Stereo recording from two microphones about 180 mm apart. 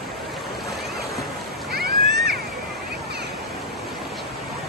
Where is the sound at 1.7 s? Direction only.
60° right (ahead or behind).